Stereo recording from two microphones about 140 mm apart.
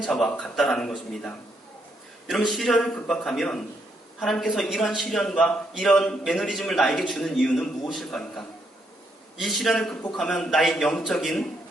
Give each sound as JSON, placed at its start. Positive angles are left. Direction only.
{"t": 0.0, "sound": "a man's voice", "side_deg": 5}